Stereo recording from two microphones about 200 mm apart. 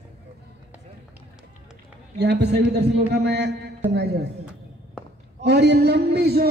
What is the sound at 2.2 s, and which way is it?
A man's voice, 55° right (ahead or behind).